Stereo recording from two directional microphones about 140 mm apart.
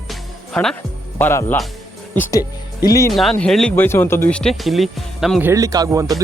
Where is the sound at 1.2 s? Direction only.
15° left (ahead or behind).